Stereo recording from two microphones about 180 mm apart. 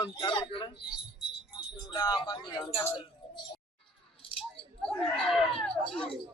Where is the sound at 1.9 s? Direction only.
25° left (ahead or behind).